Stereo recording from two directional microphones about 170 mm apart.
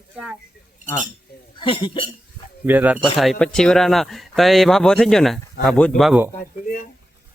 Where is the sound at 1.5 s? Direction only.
30° left (ahead or behind).